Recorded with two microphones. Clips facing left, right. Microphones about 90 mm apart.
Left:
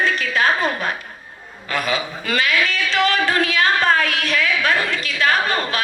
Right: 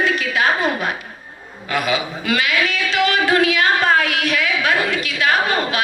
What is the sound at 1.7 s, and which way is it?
A woman's voice, 35° left (ahead or behind).